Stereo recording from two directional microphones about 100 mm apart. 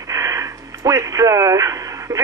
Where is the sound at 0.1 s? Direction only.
30° right (ahead or behind).